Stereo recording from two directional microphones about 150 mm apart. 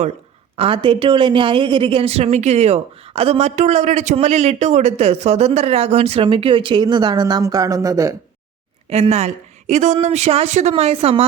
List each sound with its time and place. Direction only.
0.5 s speech: 40° right (ahead or behind); by 8.1 s 20° right (ahead or behind)
8.9 s speech: 45° right (ahead or behind)